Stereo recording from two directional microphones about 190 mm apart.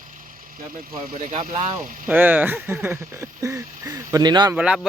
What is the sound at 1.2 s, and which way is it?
Speech, 35° right (ahead or behind).